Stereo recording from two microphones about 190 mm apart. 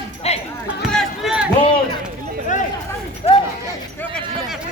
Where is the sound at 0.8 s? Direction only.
Centre (ahead or behind).